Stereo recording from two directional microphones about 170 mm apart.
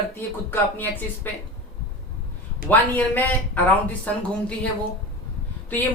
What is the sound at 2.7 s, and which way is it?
Speech, 10° left (ahead or behind).